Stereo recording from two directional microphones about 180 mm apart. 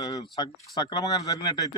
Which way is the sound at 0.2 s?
25° left (ahead or behind).